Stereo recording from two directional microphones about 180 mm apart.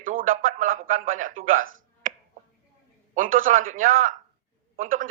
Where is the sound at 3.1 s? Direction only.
50° right (ahead or behind).